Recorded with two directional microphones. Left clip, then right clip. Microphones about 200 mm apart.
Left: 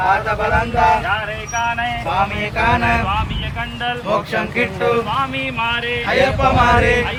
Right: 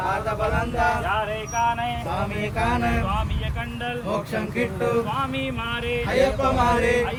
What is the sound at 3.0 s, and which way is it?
Speech, 10° right (ahead or behind).